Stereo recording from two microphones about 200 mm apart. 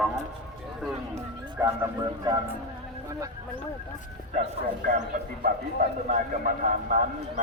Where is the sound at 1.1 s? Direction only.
15° right (ahead or behind).